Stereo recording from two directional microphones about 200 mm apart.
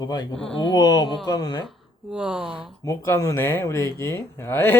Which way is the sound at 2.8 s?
15° left (ahead or behind).